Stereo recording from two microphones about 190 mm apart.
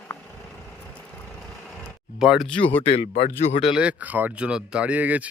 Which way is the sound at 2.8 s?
30° left (ahead or behind).